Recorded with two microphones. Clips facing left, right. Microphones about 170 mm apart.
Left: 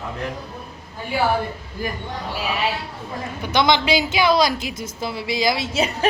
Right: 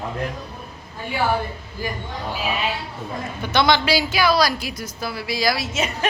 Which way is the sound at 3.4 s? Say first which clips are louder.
Even; 15° left (ahead or behind).